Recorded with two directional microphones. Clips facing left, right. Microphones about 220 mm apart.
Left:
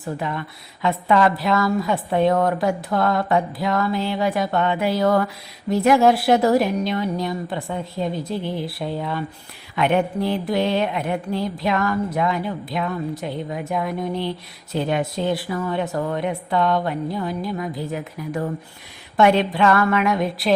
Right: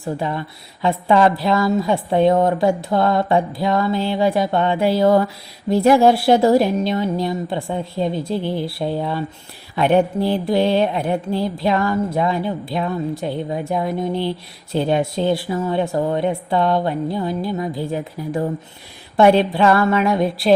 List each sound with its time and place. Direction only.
0.0 s a woman's voice: 30° right (ahead or behind)